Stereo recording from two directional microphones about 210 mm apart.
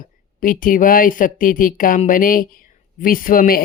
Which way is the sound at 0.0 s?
40° left (ahead or behind).